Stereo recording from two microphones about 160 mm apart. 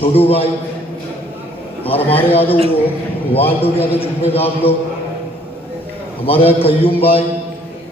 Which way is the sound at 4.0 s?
35° left (ahead or behind).